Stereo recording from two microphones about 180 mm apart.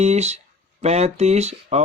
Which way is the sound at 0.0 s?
35° right (ahead or behind).